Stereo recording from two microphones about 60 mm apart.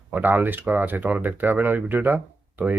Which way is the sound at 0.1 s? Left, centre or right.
Right.